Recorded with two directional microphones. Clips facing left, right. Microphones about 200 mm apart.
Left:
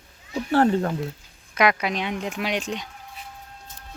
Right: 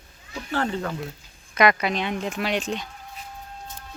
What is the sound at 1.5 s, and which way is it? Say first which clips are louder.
Speech: right 1 dB; 10° left (ahead or behind).